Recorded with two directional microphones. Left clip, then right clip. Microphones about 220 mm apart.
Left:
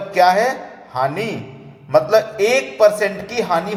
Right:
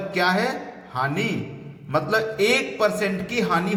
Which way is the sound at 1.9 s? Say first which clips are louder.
Left 8 dB; 5° right (ahead or behind).